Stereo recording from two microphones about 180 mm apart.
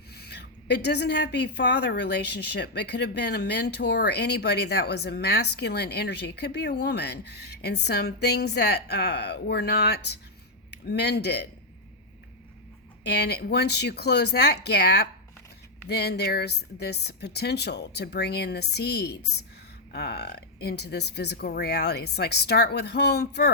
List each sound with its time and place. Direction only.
0.1 s speech: 65° left (ahead or behind)
13.1 s speech: 65° left (ahead or behind)